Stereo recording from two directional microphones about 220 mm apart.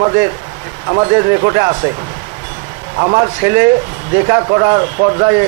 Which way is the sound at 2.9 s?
25° right (ahead or behind).